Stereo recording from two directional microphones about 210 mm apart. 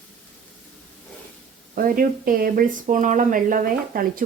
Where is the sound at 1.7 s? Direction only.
40° right (ahead or behind).